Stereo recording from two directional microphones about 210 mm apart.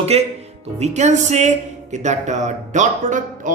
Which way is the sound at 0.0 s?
30° right (ahead or behind).